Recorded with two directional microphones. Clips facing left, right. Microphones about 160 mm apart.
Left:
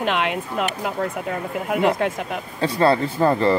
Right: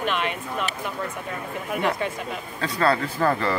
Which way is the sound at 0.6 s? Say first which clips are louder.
Left 6 dB; 60° left (ahead or behind).